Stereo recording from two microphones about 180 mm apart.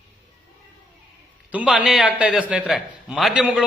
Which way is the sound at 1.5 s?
5° right (ahead or behind).